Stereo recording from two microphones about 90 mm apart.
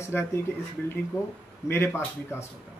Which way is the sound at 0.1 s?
20° left (ahead or behind).